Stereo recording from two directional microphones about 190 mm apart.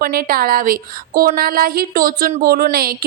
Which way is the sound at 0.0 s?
50° right (ahead or behind).